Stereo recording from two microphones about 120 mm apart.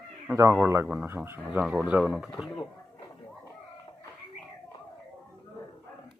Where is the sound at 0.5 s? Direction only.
20° right (ahead or behind).